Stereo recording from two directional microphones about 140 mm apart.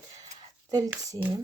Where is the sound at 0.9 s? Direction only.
15° right (ahead or behind).